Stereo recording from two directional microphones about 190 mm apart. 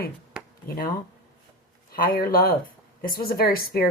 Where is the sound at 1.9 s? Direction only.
50° left (ahead or behind).